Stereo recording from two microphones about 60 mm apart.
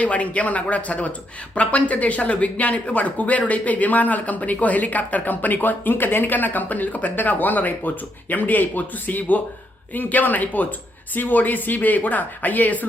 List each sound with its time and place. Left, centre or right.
0.0 s speech: left